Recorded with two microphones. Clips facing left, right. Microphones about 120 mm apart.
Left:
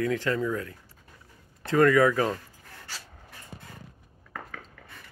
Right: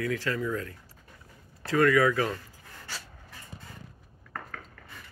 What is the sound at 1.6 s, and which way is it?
Speech, 25° left (ahead or behind).